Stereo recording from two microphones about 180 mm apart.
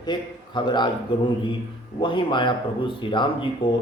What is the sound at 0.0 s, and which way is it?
A man's voice, 25° left (ahead or behind).